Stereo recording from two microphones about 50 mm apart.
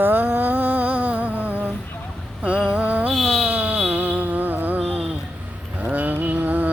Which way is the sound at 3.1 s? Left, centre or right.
Centre.